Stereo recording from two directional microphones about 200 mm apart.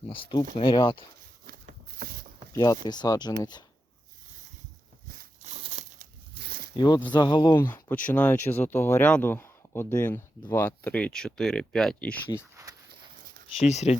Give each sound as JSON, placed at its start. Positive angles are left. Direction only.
{"t": 0.1, "sound": "speech", "side_deg": 25}
{"t": 2.0, "sound": "a sound", "side_deg": -45}
{"t": 2.5, "sound": "speech", "side_deg": 20}
{"t": 5.0, "sound": "a sound", "side_deg": -45}
{"t": 5.5, "sound": "crumpling", "side_deg": -35}
{"t": 6.3, "sound": "zipper", "side_deg": -55}
{"t": 6.7, "sound": "speech", "side_deg": 20}
{"t": 7.7, "sound": "speech", "side_deg": 10}
{"t": 13.7, "sound": "speech", "side_deg": 35}